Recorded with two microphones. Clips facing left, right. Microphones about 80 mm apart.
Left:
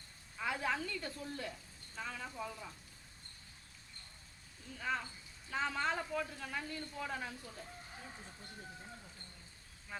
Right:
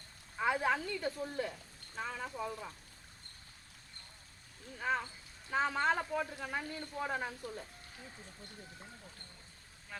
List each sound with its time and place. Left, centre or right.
0.3 s speech: right
4.8 s speech: right